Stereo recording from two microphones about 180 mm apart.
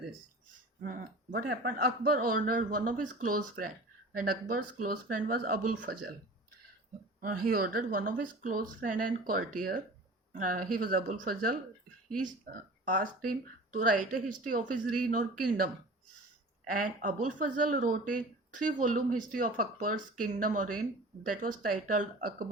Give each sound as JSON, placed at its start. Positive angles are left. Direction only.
{"t": 0.9, "sound": "a man's voice", "side_deg": -55}
{"t": 7.2, "sound": "a man's voice", "side_deg": -55}
{"t": 12.8, "sound": "a man's voice", "side_deg": -50}